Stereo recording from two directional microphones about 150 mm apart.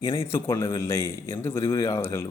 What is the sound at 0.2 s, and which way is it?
A man's voice, 15° left (ahead or behind).